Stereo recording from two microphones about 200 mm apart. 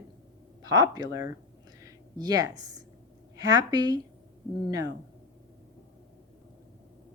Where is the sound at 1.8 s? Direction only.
20° right (ahead or behind).